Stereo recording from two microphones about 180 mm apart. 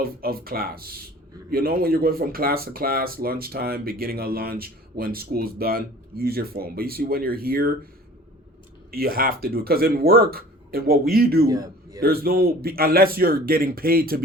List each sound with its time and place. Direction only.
0.0 s speech: 55° right (ahead or behind)
8.9 s speech: 55° right (ahead or behind)
11.4 s a man's voice: 20° right (ahead or behind)
11.9 s speech: 55° right (ahead or behind)